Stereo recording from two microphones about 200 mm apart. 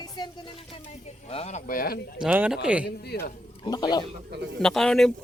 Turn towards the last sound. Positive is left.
turn(degrees=0)  # may be behind; listen again after turning